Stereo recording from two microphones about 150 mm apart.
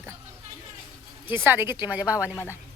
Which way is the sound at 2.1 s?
15° left (ahead or behind).